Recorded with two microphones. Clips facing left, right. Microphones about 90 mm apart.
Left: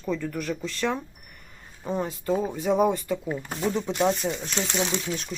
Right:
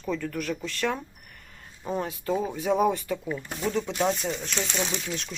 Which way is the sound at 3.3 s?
30° left (ahead or behind).